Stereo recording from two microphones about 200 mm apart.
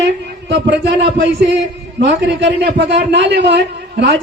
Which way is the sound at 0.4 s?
60° right (ahead or behind).